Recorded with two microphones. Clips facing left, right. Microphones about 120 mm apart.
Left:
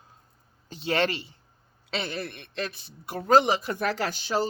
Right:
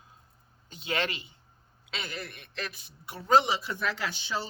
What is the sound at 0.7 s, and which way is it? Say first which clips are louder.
Speech: left 6 dB; 35° left (ahead or behind).